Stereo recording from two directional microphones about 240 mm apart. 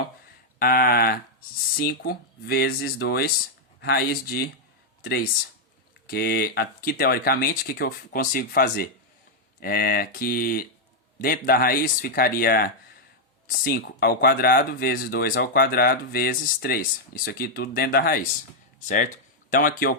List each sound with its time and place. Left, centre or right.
0.6 s speech: left
6.1 s speech: left